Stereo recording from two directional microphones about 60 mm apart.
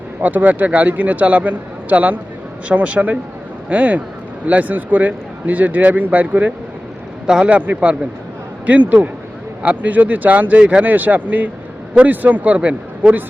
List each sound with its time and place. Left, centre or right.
0.2 s speech: right
7.3 s speech: centre
10.9 s speech: right